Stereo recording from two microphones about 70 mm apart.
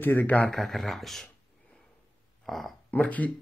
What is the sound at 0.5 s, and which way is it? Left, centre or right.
Speech, centre.